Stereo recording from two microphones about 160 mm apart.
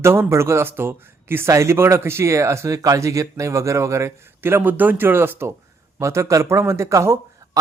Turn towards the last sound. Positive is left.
turn(degrees=-20)  # may be behind; listen again after turning